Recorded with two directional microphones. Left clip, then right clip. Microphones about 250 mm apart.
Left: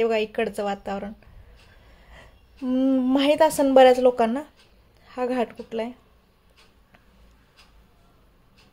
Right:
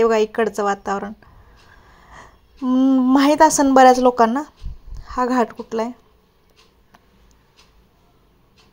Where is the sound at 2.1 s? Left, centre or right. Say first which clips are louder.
Right 8 dB; centre.